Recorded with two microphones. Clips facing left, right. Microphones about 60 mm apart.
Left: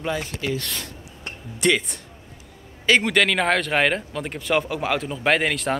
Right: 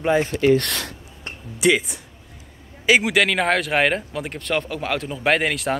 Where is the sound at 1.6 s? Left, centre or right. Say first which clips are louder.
Right 2 dB; centre.